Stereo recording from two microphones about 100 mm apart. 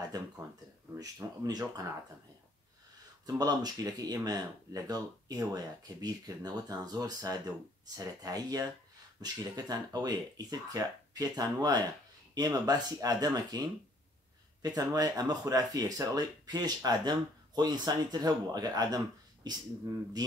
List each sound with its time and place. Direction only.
0.1 s speech: 40° right (ahead or behind)
3.3 s speech: 40° right (ahead or behind)